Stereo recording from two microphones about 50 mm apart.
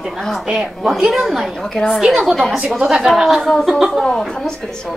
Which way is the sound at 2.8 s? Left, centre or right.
Centre.